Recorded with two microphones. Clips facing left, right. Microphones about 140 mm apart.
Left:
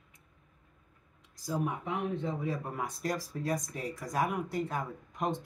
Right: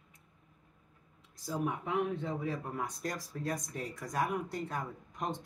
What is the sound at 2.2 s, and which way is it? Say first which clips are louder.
Speech: left 2 dB; centre (ahead or behind).